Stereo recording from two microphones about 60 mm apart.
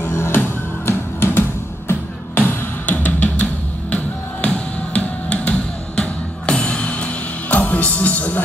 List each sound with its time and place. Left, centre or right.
0.0 s music: left